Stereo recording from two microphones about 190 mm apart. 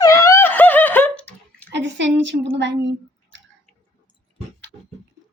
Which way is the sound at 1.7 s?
70° right (ahead or behind).